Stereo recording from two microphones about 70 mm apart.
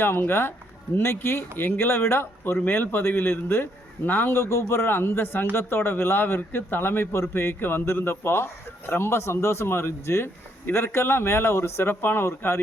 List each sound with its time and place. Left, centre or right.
0.2 s a man's voice: left